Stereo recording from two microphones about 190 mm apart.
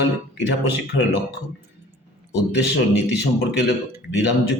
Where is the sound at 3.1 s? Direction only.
65° left (ahead or behind).